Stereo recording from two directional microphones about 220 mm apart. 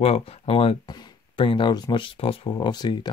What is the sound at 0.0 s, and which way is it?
Speech, 25° left (ahead or behind).